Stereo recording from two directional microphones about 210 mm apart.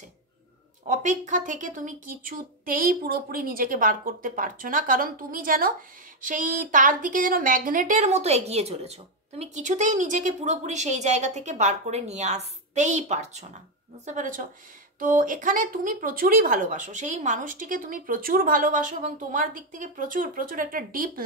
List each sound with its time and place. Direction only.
0.8 s speech: 35° right (ahead or behind)